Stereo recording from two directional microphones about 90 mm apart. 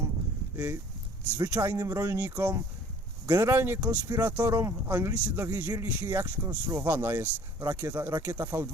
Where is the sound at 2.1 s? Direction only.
20° right (ahead or behind).